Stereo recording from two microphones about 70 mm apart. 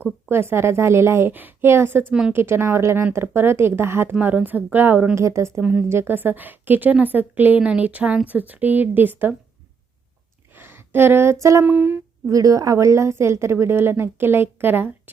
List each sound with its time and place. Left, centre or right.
0.3 s a woman's voice: right
5.1 s a woman's voice: right
10.5 s a sound: right
11.6 s a woman's voice: right
12.2 s a woman's voice: right